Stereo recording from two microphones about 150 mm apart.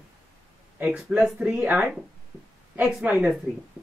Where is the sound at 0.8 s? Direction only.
10° right (ahead or behind).